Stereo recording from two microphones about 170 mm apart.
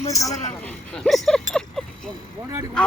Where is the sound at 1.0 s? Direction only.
5° left (ahead or behind).